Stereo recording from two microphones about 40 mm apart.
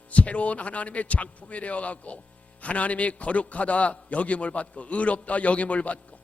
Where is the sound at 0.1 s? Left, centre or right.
Left.